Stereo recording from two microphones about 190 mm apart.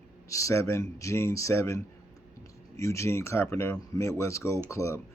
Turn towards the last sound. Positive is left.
turn(degrees=15)  # may be behind; listen again after turning